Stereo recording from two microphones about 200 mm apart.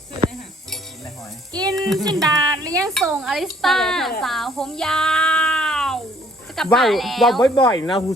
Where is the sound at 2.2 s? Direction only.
20° right (ahead or behind).